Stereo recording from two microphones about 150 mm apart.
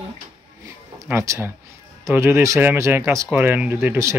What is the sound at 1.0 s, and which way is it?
Speech, 15° right (ahead or behind).